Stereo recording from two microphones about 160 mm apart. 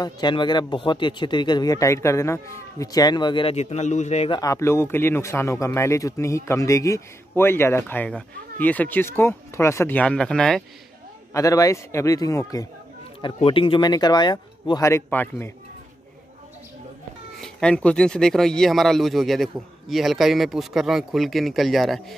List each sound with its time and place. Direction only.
0.0 s speech: 30° left (ahead or behind)
4.4 s speech: 20° left (ahead or behind)
11.3 s speech: 20° left (ahead or behind)
13.2 s speech: 30° left (ahead or behind); by 15.5 s 15° left (ahead or behind)
17.4 s speech: 5° left (ahead or behind)